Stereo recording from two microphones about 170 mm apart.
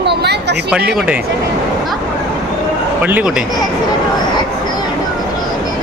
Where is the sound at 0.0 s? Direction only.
75° right (ahead or behind).